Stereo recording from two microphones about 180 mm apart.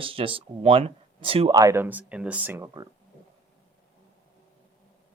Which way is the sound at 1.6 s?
15° right (ahead or behind).